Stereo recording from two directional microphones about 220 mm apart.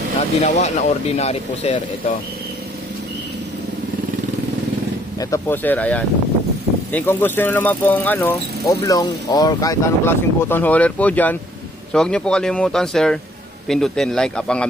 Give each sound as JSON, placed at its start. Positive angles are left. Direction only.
{"t": 0.4, "sound": "speech", "side_deg": 30}
{"t": 5.2, "sound": "speech", "side_deg": 10}